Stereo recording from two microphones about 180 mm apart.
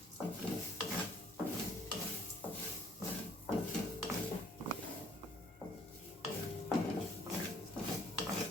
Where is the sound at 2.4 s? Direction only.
10° left (ahead or behind).